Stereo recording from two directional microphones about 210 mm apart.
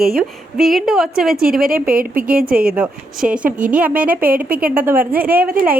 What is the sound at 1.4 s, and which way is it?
Speech, 45° right (ahead or behind).